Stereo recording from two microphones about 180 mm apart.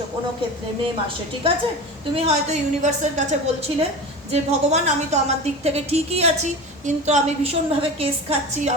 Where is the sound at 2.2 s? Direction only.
35° right (ahead or behind).